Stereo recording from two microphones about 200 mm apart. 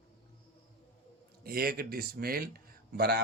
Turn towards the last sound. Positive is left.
turn(degrees=-50)  # may be behind; listen again after turning